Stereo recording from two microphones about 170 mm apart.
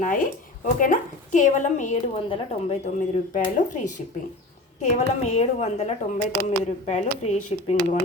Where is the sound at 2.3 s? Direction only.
35° left (ahead or behind).